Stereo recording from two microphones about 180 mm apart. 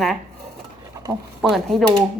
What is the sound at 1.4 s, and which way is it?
Speech, centre (ahead or behind).